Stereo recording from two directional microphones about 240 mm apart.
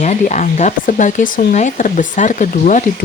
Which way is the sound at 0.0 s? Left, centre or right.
Left.